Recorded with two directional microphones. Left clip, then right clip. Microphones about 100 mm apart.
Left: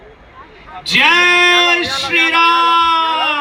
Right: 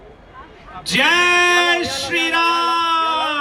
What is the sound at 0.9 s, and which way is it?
Speech, 50° right (ahead or behind).